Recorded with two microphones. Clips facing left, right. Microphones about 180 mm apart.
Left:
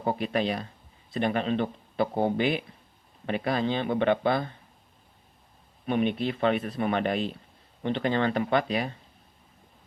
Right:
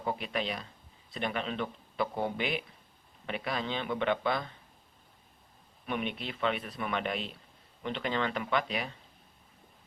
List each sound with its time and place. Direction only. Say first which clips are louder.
0.0 s speech: left 7 dB; 40° left (ahead or behind)
5.8 s speech: left 9 dB; 35° left (ahead or behind)